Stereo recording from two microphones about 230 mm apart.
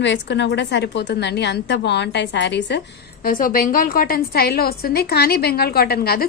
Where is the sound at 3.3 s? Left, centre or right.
Left.